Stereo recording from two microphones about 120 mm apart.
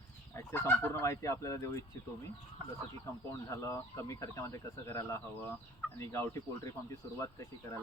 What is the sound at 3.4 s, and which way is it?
Speech, 25° left (ahead or behind).